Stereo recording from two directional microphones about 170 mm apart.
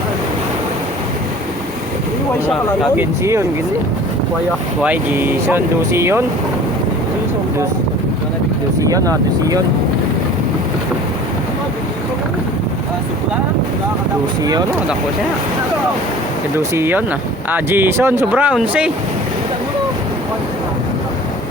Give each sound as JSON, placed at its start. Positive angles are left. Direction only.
{"t": 2.9, "sound": "speech", "side_deg": -15}
{"t": 4.8, "sound": "speech", "side_deg": -10}
{"t": 8.9, "sound": "speech", "side_deg": -20}
{"t": 16.7, "sound": "speech", "side_deg": -15}